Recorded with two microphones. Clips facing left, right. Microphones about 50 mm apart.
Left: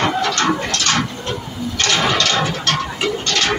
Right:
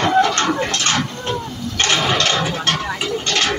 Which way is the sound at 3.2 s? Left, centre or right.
Right.